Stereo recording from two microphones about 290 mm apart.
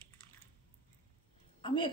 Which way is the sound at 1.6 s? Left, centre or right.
Centre.